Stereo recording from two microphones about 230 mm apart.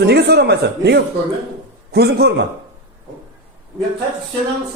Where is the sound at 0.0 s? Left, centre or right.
Right.